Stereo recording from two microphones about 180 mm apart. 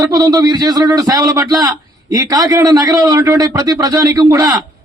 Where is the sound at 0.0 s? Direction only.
20° right (ahead or behind).